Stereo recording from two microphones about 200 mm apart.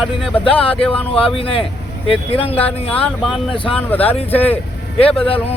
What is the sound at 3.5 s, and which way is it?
Speech, 25° left (ahead or behind).